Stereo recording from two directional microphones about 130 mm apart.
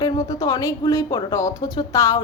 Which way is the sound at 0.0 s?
30° left (ahead or behind).